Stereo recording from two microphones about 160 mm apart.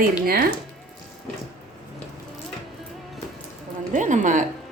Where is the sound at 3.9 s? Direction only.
50° right (ahead or behind).